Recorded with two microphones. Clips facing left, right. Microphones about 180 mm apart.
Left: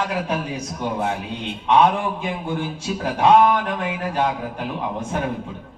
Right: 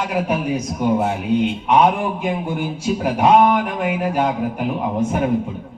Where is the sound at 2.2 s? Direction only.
15° right (ahead or behind).